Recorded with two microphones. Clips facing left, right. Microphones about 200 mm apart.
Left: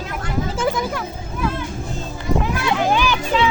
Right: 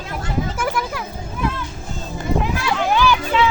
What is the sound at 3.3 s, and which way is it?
Children playing, 35° left (ahead or behind).